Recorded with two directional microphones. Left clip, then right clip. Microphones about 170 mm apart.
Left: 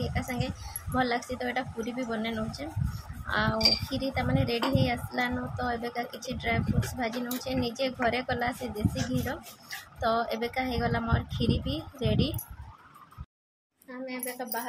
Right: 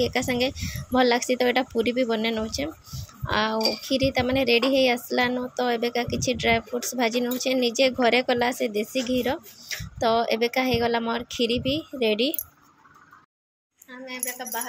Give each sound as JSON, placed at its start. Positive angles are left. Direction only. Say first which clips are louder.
{"t": 0.0, "sound": "speech", "louder": "right 10 dB", "side_deg": -45}
{"t": 14.0, "sound": "speech", "louder": "right 2 dB", "side_deg": 10}